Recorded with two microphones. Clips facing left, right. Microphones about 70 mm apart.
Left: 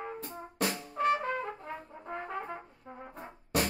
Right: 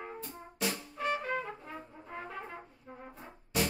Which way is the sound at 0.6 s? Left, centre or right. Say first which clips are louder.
Left 4 dB; left.